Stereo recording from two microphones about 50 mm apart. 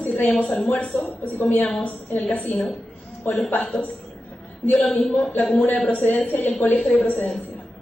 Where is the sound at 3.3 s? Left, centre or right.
Left.